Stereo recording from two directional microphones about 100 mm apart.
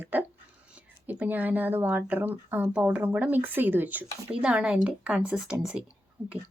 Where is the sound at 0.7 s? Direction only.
15° right (ahead or behind).